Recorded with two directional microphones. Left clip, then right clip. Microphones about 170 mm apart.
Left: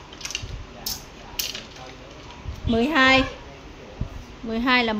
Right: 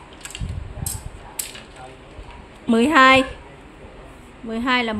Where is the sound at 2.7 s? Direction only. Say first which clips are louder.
Right 5 dB; 25° right (ahead or behind).